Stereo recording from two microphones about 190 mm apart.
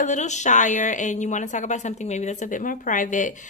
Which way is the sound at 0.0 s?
40° left (ahead or behind).